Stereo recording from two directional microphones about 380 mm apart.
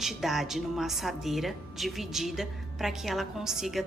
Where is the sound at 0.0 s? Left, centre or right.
Centre.